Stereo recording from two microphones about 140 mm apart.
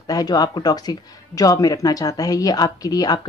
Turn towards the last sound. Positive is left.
turn(degrees=25)  # may be behind; listen again after turning